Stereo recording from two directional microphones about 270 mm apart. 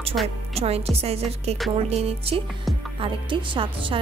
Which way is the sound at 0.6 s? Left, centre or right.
Right.